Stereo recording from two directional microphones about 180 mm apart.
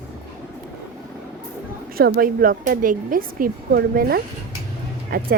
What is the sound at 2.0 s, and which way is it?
A woman's voice, 55° right (ahead or behind).